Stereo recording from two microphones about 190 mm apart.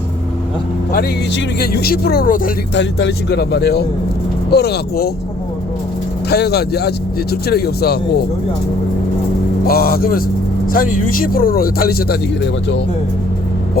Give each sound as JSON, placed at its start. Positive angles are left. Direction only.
{"t": 1.5, "sound": "speech", "side_deg": 55}
{"t": 2.7, "sound": "speech", "side_deg": 65}
{"t": 6.3, "sound": "speech", "side_deg": 60}
{"t": 9.6, "sound": "speech", "side_deg": 50}